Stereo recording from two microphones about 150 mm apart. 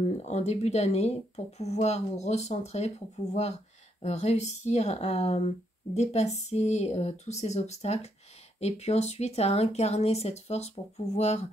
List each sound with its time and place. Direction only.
0.0 s speech: 50° left (ahead or behind)
4.0 s speech: 45° left (ahead or behind)